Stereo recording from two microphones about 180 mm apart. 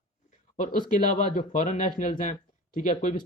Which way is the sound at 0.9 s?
45° left (ahead or behind).